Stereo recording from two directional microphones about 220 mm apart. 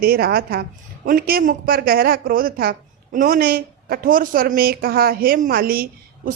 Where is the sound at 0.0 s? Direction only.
45° right (ahead or behind).